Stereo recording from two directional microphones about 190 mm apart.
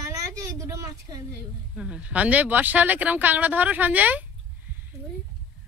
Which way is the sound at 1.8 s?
5° right (ahead or behind).